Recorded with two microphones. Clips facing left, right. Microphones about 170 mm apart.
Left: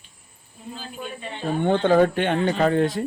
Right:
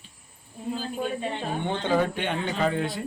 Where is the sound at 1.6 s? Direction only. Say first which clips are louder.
Left 8 dB; 55° left (ahead or behind).